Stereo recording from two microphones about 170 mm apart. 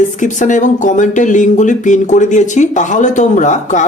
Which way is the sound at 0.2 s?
45° left (ahead or behind).